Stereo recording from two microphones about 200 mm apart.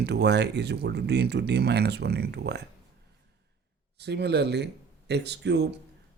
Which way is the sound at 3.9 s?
55° right (ahead or behind).